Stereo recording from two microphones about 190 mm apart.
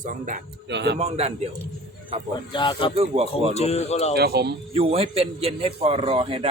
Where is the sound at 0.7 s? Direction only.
65° right (ahead or behind).